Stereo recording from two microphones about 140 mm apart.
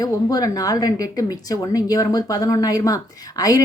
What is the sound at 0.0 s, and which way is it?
Speech, 25° left (ahead or behind).